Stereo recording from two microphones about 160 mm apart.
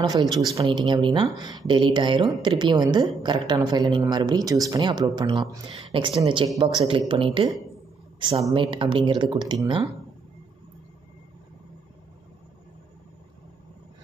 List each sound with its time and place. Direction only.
0.6 s a woman's voice: 30° right (ahead or behind)